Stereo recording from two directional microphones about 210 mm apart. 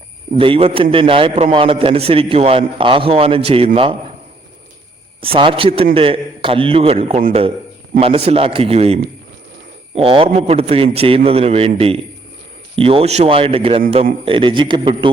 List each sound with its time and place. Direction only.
0.3 s a man's voice: 25° right (ahead or behind)
5.2 s a man's voice: 25° right (ahead or behind)
7.2 s a man's voice: 40° right (ahead or behind)
7.9 s a man's voice: 25° right (ahead or behind)